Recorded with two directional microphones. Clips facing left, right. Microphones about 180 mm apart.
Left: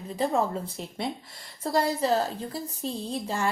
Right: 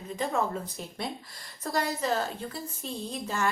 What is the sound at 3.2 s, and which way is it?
Speech, 30° left (ahead or behind).